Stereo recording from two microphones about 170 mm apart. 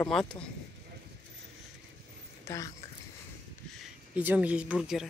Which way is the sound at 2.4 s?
20° left (ahead or behind).